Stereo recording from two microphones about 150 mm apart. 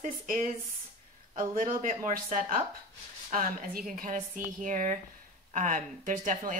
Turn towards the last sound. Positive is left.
turn(degrees=-60)  # may be behind; listen again after turning